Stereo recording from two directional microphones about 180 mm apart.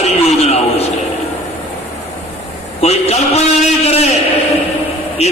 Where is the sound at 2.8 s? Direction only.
35° left (ahead or behind).